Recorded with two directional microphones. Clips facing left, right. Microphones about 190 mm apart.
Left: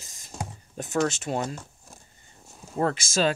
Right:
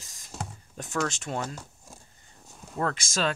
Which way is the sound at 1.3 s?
30° left (ahead or behind).